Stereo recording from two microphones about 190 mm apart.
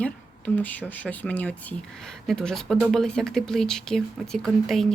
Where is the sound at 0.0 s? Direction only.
10° left (ahead or behind).